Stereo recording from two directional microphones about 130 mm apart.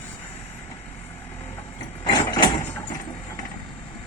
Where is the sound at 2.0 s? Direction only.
35° left (ahead or behind).